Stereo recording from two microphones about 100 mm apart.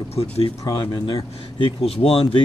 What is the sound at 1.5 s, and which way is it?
Speech, 70° left (ahead or behind).